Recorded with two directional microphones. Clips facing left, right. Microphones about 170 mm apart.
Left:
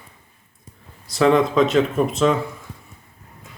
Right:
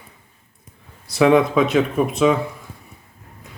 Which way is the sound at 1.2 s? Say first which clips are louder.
Right 1 dB; 10° right (ahead or behind).